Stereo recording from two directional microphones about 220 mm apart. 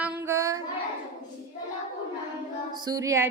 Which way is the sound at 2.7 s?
20° right (ahead or behind).